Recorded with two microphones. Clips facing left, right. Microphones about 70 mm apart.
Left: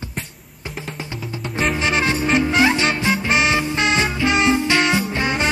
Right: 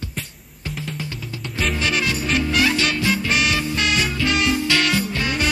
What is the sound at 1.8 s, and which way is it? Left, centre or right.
Music, left.